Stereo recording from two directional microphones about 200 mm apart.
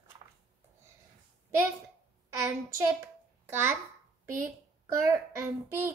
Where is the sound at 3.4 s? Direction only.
10° right (ahead or behind).